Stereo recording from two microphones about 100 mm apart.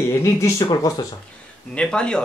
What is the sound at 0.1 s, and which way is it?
Speech, 30° left (ahead or behind).